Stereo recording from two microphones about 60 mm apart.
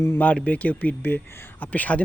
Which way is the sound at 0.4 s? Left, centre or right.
Left.